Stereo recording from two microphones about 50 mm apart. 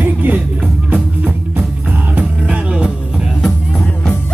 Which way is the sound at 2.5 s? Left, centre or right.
Right.